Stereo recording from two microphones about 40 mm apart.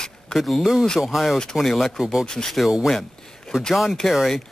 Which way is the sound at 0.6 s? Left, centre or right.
Centre.